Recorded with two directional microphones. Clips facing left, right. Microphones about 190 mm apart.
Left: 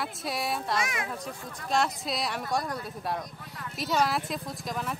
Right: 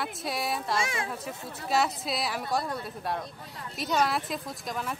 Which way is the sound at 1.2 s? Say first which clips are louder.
Right 1 dB; 5° right (ahead or behind).